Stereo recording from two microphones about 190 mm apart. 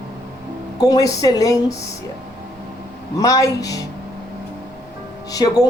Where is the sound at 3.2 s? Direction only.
15° left (ahead or behind).